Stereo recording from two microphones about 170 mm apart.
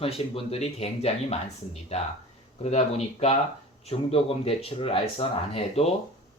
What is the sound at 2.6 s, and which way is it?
Speech, 40° left (ahead or behind).